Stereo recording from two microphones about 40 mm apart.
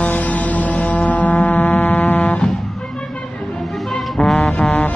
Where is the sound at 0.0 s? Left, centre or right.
Left.